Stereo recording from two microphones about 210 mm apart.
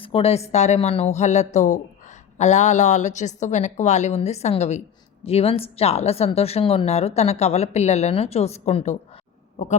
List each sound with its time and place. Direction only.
0.0 s a woman's voice: 25° left (ahead or behind)